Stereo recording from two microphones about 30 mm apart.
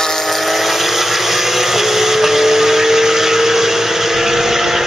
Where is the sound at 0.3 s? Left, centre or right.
Centre.